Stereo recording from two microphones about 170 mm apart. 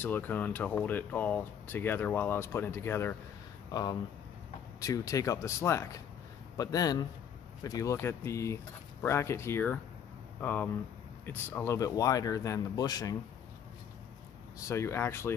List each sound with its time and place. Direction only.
0.0 s speech: 10° left (ahead or behind)
4.7 s a man's voice: 20° left (ahead or behind)
14.7 s speech: 15° left (ahead or behind)